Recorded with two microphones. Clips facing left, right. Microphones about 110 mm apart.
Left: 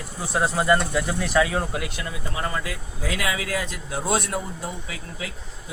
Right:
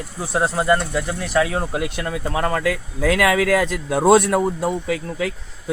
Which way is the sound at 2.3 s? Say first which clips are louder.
Right 9 dB; 60° right (ahead or behind).